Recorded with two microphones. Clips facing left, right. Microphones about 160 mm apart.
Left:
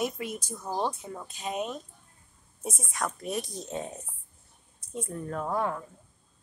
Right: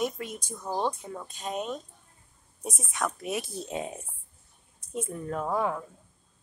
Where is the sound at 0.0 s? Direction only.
5° left (ahead or behind); by 4.0 s 10° right (ahead or behind).